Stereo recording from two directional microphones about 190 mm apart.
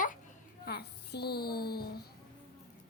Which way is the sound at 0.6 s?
55° left (ahead or behind).